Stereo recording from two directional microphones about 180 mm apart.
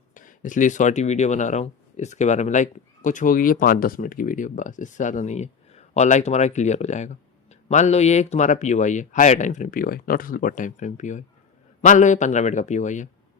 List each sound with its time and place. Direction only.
0.1 s speech: 45° left (ahead or behind)